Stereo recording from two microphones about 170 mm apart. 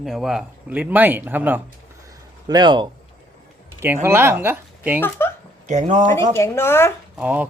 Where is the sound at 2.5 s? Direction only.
25° right (ahead or behind).